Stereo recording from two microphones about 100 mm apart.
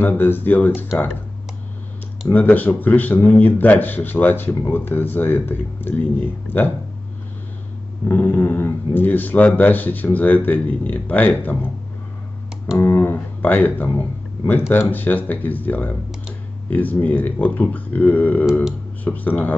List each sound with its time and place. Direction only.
0.0 s a man's voice: 20° left (ahead or behind)
2.3 s a man's voice: 15° left (ahead or behind)
8.1 s a man's voice: 20° left (ahead or behind)
12.7 s speech: 20° left (ahead or behind)
18.5 s speech: 5° right (ahead or behind)
19.0 s speech: 15° left (ahead or behind)